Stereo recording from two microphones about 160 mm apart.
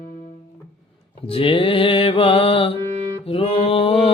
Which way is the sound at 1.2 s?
35° left (ahead or behind).